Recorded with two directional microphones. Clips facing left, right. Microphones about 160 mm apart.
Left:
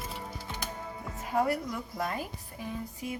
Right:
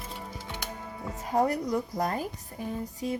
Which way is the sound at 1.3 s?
35° right (ahead or behind).